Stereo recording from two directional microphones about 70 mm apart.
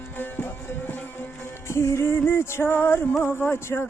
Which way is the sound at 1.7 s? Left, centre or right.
Left.